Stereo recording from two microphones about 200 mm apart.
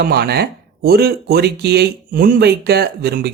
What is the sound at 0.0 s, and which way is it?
Speech, 50° right (ahead or behind).